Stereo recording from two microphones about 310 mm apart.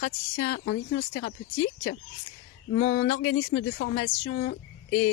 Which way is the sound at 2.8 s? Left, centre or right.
Left.